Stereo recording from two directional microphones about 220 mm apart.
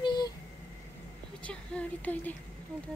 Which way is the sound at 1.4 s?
5° left (ahead or behind).